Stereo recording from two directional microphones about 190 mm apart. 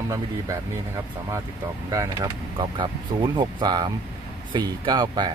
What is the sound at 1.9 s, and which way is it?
Speech, 20° right (ahead or behind).